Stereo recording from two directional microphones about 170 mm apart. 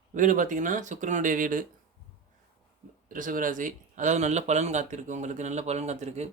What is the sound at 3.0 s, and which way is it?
Speech, 55° right (ahead or behind).